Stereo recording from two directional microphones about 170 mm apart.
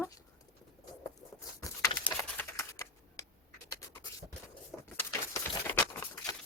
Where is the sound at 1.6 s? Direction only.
20° left (ahead or behind).